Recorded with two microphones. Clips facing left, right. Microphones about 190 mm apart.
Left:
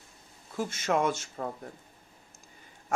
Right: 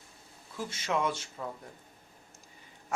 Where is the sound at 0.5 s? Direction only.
50° left (ahead or behind).